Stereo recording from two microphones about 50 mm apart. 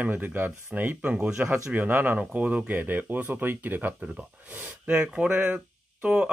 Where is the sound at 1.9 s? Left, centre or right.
Right.